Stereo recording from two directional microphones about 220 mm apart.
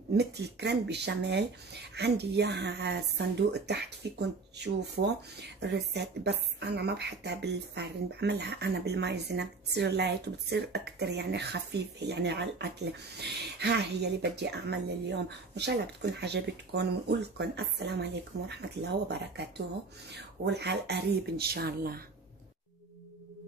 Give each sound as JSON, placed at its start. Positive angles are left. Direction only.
{"t": 0.1, "sound": "speech", "side_deg": -50}